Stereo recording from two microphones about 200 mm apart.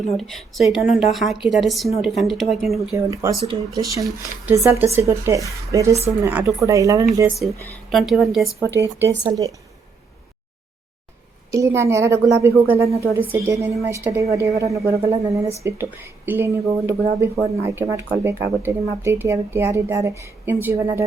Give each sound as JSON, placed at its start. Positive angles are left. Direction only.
{"t": 0.2, "sound": "speech", "side_deg": 0}
{"t": 2.9, "sound": "a woman's voice", "side_deg": -15}
{"t": 7.9, "sound": "speech", "side_deg": 0}
{"t": 8.6, "sound": "a woman's voice", "side_deg": -15}
{"t": 11.5, "sound": "a woman's voice", "side_deg": -15}
{"t": 14.9, "sound": "speech", "side_deg": -30}
{"t": 15.2, "sound": "a woman's voice", "side_deg": -15}